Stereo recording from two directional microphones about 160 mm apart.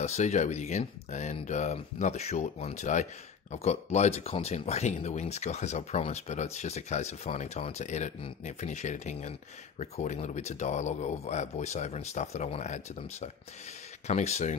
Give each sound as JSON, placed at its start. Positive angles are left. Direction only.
{"t": 0.0, "sound": "speech", "side_deg": 45}